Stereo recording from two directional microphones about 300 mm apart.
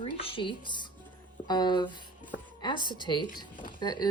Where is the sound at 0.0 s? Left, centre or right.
Centre.